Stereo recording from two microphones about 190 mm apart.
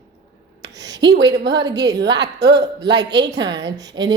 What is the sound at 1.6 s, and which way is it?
Speech, 20° right (ahead or behind).